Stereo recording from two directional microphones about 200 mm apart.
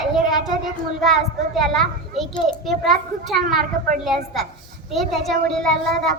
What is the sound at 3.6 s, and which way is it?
Speech, 45° right (ahead or behind).